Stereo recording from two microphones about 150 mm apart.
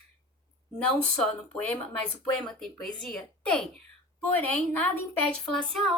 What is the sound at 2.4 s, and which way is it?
A woman's voice, 5° left (ahead or behind).